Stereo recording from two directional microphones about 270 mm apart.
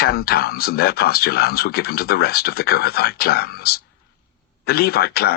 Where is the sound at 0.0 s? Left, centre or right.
Left.